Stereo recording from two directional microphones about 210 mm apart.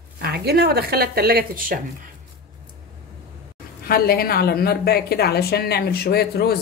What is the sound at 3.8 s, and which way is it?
A woman's voice, 45° left (ahead or behind).